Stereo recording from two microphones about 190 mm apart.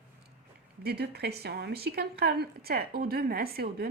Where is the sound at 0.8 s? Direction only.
60° right (ahead or behind).